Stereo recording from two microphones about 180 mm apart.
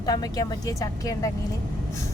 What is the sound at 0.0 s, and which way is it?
Speech, 20° left (ahead or behind).